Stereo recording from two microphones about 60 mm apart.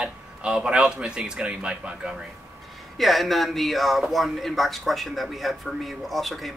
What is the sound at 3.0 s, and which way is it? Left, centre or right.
Speech, centre.